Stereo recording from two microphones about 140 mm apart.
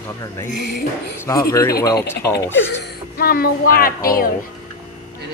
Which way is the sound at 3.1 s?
90° left.